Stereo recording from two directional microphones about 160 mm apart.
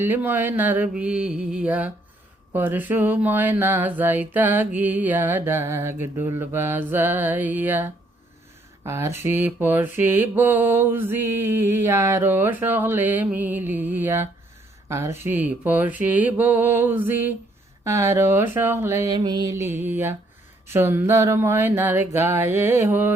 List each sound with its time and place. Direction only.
0.0 s mantra: 10° right (ahead or behind)
14.8 s speech: 15° right (ahead or behind)
15.2 s mantra: 10° right (ahead or behind)
17.8 s speech: 20° right (ahead or behind)
20.7 s mantra: 15° right (ahead or behind)